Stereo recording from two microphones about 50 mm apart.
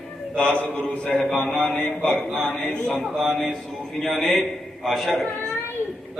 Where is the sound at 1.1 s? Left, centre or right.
Centre.